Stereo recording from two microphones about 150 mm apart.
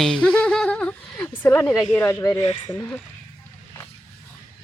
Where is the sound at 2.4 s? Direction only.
50° left (ahead or behind).